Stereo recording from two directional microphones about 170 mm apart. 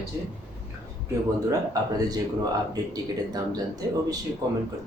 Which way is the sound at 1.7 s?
20° right (ahead or behind).